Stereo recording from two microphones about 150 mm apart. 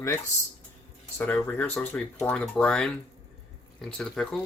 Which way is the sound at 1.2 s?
10° left (ahead or behind).